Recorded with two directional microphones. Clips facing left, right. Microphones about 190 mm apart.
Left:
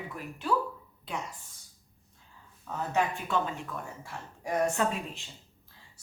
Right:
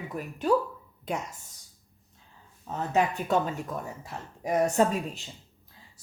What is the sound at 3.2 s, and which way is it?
Speech, 40° right (ahead or behind).